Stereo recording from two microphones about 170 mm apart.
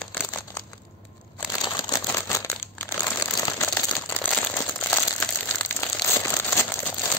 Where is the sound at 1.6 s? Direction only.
20° left (ahead or behind).